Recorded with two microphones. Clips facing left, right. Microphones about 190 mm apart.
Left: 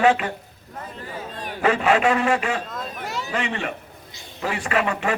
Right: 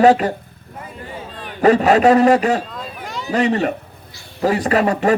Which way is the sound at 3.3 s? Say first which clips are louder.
Right 12 dB; 40° right (ahead or behind).